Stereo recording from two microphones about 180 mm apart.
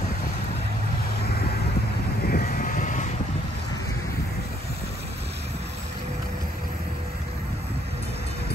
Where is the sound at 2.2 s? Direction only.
55° left (ahead or behind).